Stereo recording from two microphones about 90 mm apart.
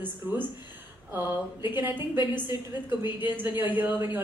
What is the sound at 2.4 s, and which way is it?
Speech, 25° right (ahead or behind).